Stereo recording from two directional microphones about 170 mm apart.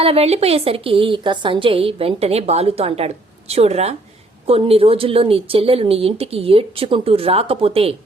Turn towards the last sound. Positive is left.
turn(degrees=-35)  # may be behind; listen again after turning